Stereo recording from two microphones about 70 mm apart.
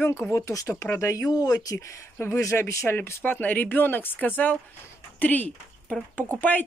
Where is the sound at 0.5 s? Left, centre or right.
Left.